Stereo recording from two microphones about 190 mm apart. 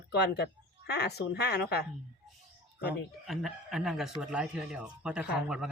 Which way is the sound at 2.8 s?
Centre (ahead or behind).